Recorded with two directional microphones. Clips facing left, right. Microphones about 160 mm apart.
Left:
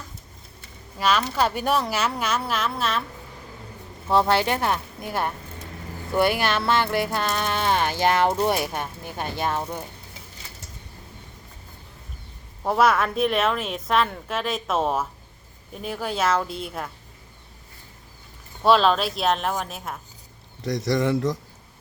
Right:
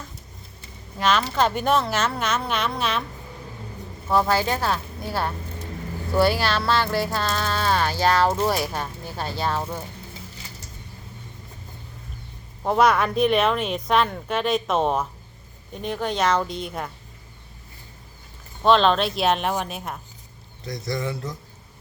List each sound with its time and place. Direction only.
0.9 s speech: 10° left (ahead or behind)
4.1 s speech: 25° left (ahead or behind)
12.6 s a woman's voice: centre (ahead or behind)
18.6 s a woman's voice: 5° left (ahead or behind)
20.7 s speech: 90° left